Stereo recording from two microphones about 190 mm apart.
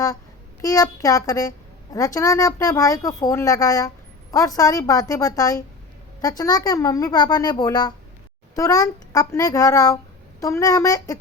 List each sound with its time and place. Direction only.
0.6 s a woman's voice: 20° left (ahead or behind)